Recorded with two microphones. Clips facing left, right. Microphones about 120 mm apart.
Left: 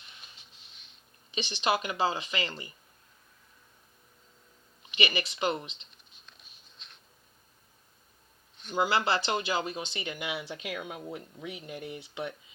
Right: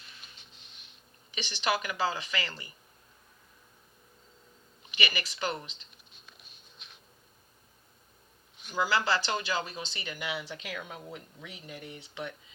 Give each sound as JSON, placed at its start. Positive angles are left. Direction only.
{"t": 1.3, "sound": "speech", "side_deg": 25}
{"t": 4.9, "sound": "speech", "side_deg": 25}
{"t": 5.9, "sound": "patter", "side_deg": -5}
{"t": 8.7, "sound": "speech", "side_deg": 25}